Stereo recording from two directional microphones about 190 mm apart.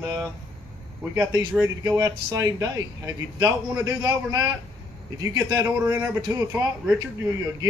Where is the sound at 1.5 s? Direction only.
15° right (ahead or behind).